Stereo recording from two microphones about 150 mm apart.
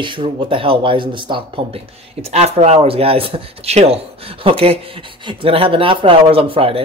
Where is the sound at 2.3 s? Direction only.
45° right (ahead or behind).